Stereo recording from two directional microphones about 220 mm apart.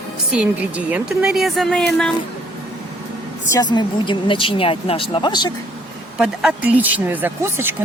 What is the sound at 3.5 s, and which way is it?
Speech, 20° left (ahead or behind).